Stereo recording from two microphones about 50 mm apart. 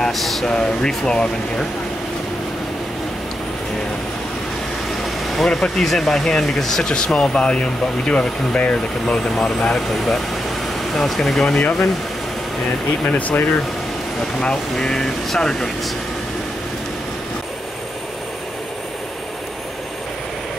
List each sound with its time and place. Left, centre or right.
0.1 s speech: centre
5.0 s speech: centre
7.2 s speech: centre
9.0 s speech: centre
13.0 s speech: left
14.8 s speech: centre